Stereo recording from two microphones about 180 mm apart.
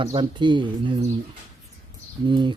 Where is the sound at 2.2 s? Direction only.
25° right (ahead or behind).